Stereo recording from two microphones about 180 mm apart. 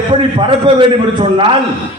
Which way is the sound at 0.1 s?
30° right (ahead or behind).